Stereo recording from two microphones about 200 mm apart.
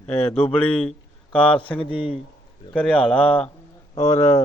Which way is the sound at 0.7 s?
5° left (ahead or behind).